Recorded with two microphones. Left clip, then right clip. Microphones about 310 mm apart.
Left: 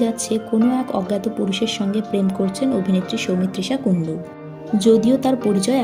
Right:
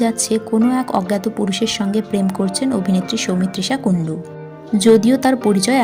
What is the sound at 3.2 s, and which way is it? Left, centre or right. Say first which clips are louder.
Speech: right 2 dB; right.